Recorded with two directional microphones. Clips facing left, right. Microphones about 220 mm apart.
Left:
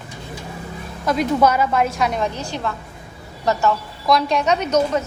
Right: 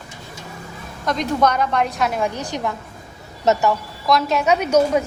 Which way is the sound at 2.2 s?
15° right (ahead or behind).